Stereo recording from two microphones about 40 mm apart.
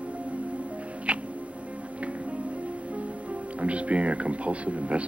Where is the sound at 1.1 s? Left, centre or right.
Right.